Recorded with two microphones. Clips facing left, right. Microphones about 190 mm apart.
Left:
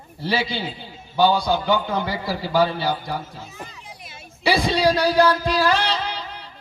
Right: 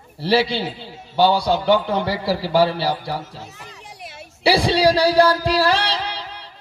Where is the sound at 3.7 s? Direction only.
70° right (ahead or behind).